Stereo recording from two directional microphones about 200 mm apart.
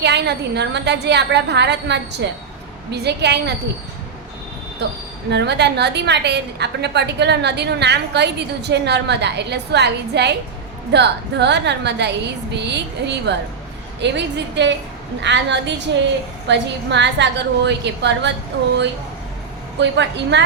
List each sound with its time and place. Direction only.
0.0 s a woman's voice: 55° right (ahead or behind)
5.3 s a woman's voice: 60° right (ahead or behind)
19.8 s a woman's voice: 60° right (ahead or behind)